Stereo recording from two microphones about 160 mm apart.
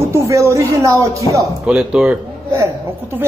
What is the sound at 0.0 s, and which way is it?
Speech, 15° right (ahead or behind).